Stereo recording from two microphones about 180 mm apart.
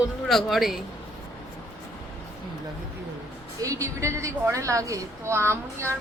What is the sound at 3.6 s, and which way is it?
A woman's voice, 15° right (ahead or behind).